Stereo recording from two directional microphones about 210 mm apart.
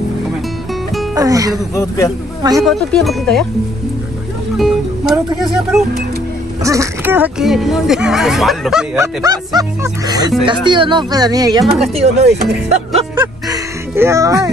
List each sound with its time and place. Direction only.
1.1 s speech: 15° right (ahead or behind)
1.8 s speech: 15° left (ahead or behind)
2.6 s speech: centre (ahead or behind)
4.6 s speech: centre (ahead or behind)
6.6 s speech: 15° right (ahead or behind)
8.9 s speech: 15° right (ahead or behind)
11.7 s speech: 30° right (ahead or behind)
12.6 s music: 30° right (ahead or behind)
13.2 s music: 10° right (ahead or behind)